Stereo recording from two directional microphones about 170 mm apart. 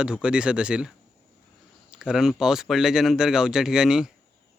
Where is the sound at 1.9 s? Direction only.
5° right (ahead or behind).